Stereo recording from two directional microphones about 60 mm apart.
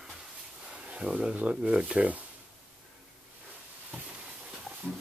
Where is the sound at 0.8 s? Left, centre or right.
Centre.